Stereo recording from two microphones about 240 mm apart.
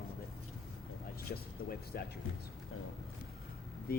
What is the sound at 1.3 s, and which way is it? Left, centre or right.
Speech, left.